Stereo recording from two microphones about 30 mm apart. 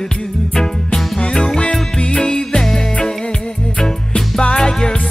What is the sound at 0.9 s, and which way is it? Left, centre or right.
Music, left.